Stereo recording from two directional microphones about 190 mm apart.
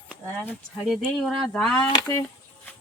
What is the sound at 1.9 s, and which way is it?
Speech, 20° left (ahead or behind).